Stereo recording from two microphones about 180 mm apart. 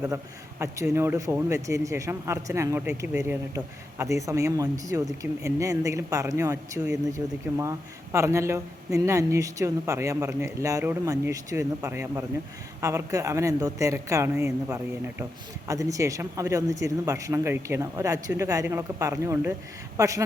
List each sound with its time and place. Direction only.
0.6 s speech: 15° right (ahead or behind)